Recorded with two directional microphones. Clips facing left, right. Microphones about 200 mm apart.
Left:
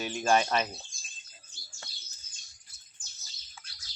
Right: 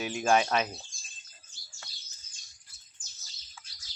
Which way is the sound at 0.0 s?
5° right (ahead or behind).